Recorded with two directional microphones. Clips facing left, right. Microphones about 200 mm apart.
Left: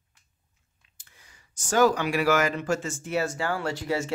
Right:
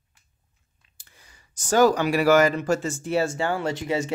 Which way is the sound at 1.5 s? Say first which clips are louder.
Right 3 dB; 35° right (ahead or behind).